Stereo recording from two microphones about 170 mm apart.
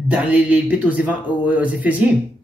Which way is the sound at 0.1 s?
5° right (ahead or behind).